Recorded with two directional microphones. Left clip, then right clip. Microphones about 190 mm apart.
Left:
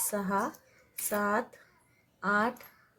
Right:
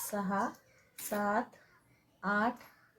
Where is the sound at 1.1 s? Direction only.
35° left (ahead or behind).